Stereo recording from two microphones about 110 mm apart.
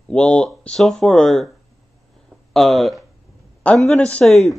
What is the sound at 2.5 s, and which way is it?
Speech, centre (ahead or behind).